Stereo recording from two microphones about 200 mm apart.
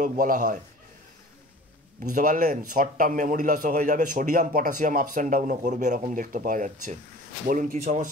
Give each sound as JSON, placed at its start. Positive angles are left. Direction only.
{"t": 0.0, "sound": "a man's voice", "side_deg": -40}
{"t": 2.1, "sound": "a man's voice", "side_deg": -40}